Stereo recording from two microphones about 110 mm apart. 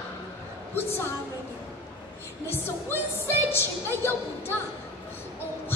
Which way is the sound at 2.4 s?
20° left (ahead or behind).